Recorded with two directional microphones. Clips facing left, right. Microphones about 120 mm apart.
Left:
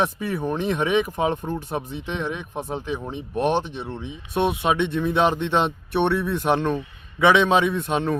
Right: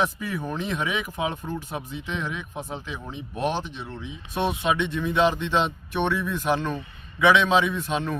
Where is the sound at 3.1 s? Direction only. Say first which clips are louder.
Left 4 dB; 55° left (ahead or behind).